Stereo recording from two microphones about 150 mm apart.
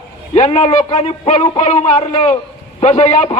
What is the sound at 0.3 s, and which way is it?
A man's voice, 45° left (ahead or behind).